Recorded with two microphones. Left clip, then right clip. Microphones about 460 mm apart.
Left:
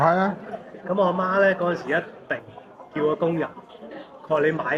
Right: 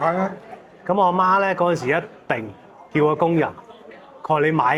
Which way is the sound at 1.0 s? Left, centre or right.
Right.